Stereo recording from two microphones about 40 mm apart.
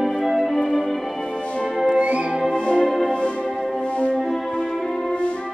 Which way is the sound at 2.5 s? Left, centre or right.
Left.